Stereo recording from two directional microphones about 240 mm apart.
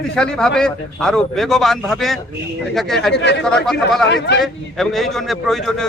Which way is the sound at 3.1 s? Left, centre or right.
Left.